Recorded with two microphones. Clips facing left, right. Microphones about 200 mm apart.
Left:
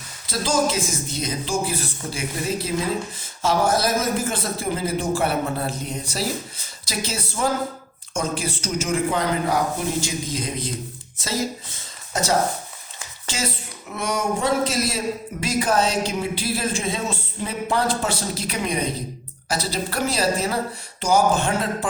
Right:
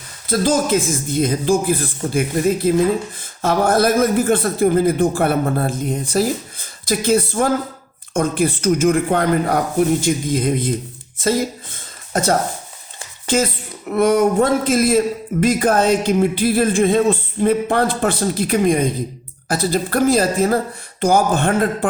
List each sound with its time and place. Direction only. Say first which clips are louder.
0.3 s a man's voice: right 6 dB; 55° right (ahead or behind)